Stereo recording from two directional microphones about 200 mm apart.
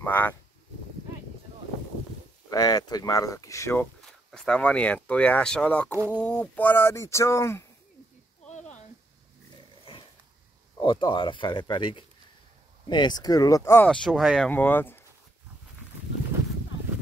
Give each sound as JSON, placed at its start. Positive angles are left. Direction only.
{"t": 0.0, "sound": "speech", "side_deg": 10}
{"t": 2.5, "sound": "speech", "side_deg": 20}
{"t": 8.5, "sound": "a sound", "side_deg": 35}
{"t": 10.8, "sound": "speech", "side_deg": 25}
{"t": 13.8, "sound": "speech", "side_deg": 0}